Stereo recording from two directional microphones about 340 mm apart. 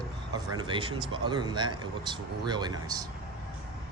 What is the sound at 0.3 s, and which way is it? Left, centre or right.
Speech, centre.